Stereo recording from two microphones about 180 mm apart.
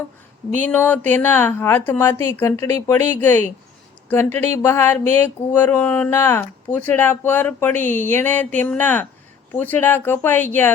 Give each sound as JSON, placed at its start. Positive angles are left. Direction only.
{"t": 0.7, "sound": "a woman's voice", "side_deg": 10}